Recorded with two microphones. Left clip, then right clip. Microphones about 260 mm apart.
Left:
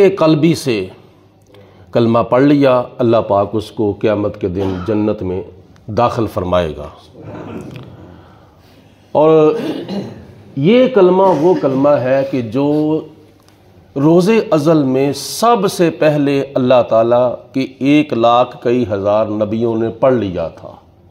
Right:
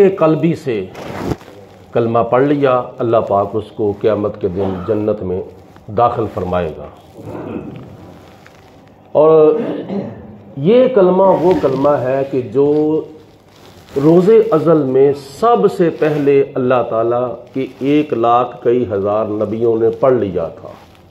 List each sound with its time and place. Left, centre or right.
0.0 s a man's voice: left
2.0 s a man's voice: left
9.1 s a man's voice: left
10.6 s a man's voice: left
14.0 s a man's voice: left